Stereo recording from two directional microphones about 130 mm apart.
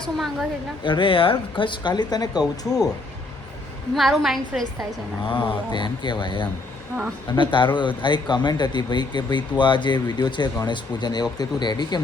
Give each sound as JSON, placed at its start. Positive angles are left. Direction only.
{"t": 0.0, "sound": "a woman's voice", "side_deg": 0}
{"t": 0.9, "sound": "speech", "side_deg": 40}
{"t": 3.9, "sound": "a woman's voice", "side_deg": 0}
{"t": 5.2, "sound": "speech", "side_deg": 40}